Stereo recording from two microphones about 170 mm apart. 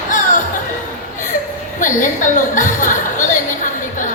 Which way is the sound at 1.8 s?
50° left (ahead or behind).